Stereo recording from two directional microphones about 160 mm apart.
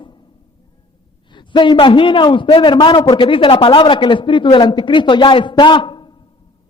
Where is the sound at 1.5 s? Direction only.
30° left (ahead or behind).